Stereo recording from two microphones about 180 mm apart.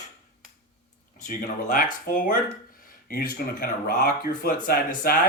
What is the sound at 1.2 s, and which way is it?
Speech, 45° left (ahead or behind).